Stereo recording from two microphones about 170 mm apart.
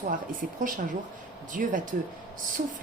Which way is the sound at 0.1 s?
50° right (ahead or behind).